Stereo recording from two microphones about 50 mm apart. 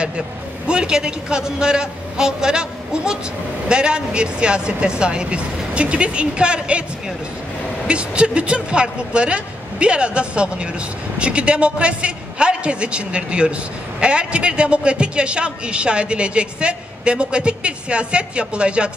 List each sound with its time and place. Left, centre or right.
0.7 s a man's voice: centre
7.8 s a woman's voice: right